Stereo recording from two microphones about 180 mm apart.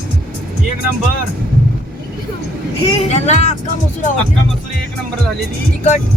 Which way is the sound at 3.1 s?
40° left (ahead or behind).